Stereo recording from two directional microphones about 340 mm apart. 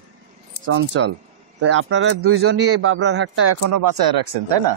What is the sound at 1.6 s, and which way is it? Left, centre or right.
Speech, right.